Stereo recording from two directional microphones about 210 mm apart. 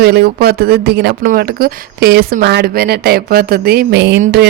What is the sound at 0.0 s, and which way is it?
Speech, 50° right (ahead or behind).